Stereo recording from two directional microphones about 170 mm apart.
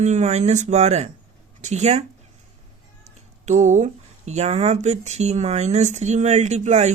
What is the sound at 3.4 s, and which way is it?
Speech, 45° right (ahead or behind).